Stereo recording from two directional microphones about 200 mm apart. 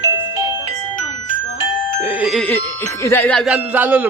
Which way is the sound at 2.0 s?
5° right (ahead or behind).